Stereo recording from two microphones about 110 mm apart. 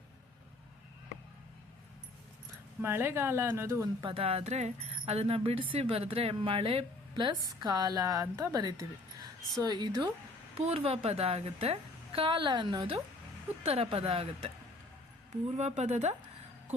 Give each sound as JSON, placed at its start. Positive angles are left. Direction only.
{"t": 2.8, "sound": "speech", "side_deg": -20}
{"t": 4.0, "sound": "speech", "side_deg": -60}
{"t": 7.4, "sound": "a woman's voice", "side_deg": -35}
{"t": 10.6, "sound": "speech", "side_deg": -65}
{"t": 13.7, "sound": "speech", "side_deg": -65}
{"t": 15.5, "sound": "speech", "side_deg": -90}